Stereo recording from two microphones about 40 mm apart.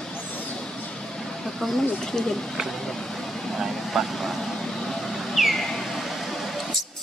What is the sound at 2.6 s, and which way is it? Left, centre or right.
Vehicle, centre.